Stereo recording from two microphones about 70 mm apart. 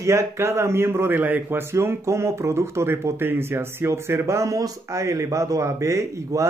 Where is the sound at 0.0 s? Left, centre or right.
Right.